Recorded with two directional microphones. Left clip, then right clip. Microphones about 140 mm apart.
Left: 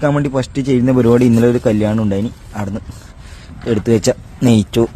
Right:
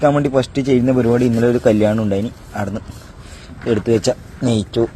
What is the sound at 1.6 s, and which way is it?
Speech, 10° left (ahead or behind).